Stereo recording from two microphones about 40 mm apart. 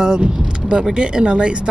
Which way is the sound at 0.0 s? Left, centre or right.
Right.